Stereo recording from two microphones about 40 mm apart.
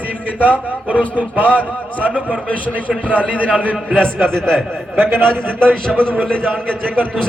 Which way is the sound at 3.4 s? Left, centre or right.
Right.